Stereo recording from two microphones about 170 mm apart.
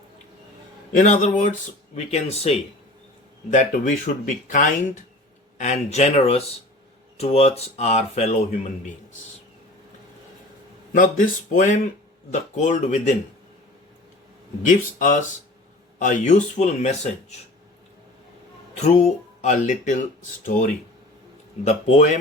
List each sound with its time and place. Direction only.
0.9 s speech: 45° left (ahead or behind)
10.9 s speech: 50° left (ahead or behind)
14.7 s speech: 50° left (ahead or behind)
18.8 s speech: 40° left (ahead or behind)